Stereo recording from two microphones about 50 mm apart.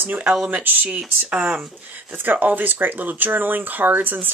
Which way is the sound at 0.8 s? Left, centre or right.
Right.